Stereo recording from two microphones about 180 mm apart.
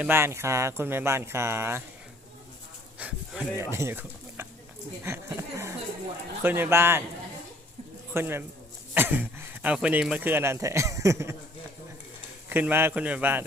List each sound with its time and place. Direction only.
0.0 s speech: 15° right (ahead or behind)
3.0 s speech: 5° right (ahead or behind)
8.1 s speech: 10° right (ahead or behind)
12.5 s speech: 10° right (ahead or behind)